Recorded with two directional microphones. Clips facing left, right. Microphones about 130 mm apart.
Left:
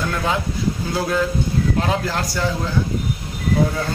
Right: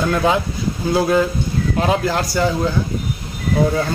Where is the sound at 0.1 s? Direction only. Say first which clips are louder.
Right 5 dB; 20° right (ahead or behind).